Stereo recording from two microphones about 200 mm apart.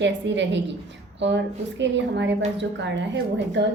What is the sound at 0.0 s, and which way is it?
A woman's voice, 65° right (ahead or behind).